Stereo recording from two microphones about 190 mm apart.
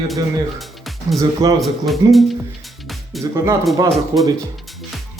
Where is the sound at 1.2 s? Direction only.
20° right (ahead or behind).